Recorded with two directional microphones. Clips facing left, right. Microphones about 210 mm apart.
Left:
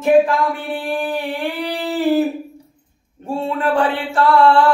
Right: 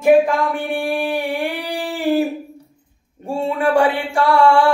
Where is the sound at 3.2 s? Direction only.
15° right (ahead or behind).